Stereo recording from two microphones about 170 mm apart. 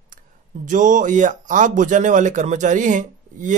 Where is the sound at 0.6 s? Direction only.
45° right (ahead or behind).